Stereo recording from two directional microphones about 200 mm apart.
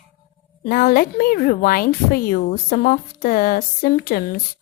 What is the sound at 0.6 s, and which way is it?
A woman's voice, 45° left (ahead or behind).